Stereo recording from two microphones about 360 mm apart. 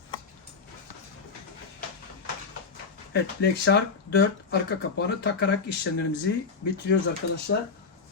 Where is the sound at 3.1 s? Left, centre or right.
Left.